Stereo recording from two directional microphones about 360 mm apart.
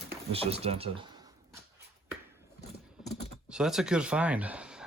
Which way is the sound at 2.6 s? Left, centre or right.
Centre.